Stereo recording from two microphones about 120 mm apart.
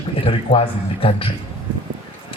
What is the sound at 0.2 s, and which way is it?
A man's voice, 50° left (ahead or behind).